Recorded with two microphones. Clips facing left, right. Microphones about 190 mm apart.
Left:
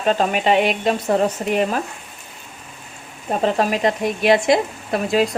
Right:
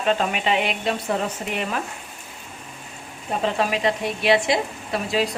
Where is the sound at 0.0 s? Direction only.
40° left (ahead or behind).